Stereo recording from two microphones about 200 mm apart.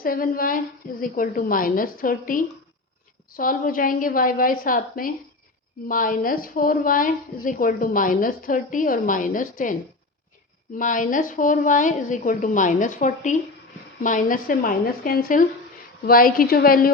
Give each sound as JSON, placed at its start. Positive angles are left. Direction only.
{"t": 0.0, "sound": "a woman's voice", "side_deg": 45}
{"t": 10.8, "sound": "a woman's voice", "side_deg": 40}